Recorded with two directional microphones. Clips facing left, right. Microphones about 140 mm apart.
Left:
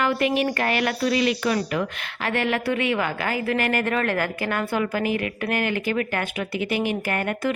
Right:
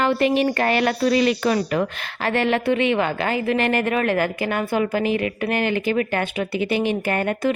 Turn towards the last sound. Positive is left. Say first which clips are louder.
# right 4 dB
turn(degrees=-25)  # may be behind; listen again after turning